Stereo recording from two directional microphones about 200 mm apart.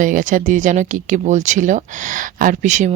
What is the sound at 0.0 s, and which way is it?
Speech, 40° right (ahead or behind).